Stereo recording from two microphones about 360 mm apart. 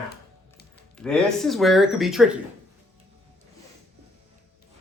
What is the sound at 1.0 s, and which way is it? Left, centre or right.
Speech, centre.